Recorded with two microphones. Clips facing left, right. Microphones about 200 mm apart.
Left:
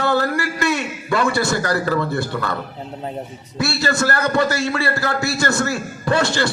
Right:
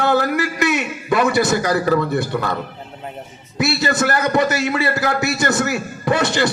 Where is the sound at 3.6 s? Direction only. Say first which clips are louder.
Right 2 dB; 20° right (ahead or behind).